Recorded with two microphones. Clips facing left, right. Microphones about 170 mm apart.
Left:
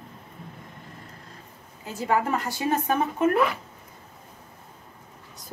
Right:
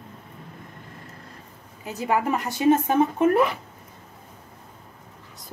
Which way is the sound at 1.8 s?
15° right (ahead or behind).